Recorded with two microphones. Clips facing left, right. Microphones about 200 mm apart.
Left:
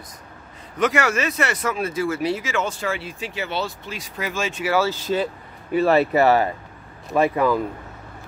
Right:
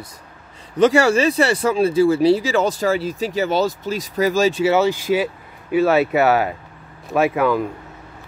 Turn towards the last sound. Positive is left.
turn(degrees=-5)  # may be behind; listen again after turning